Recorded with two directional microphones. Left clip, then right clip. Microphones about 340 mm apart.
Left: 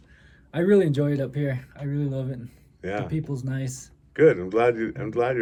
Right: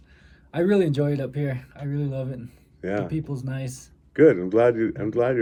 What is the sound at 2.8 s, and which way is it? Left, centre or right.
Speech, right.